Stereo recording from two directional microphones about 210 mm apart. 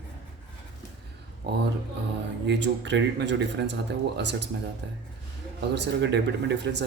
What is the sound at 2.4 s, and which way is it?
Speech, 55° right (ahead or behind).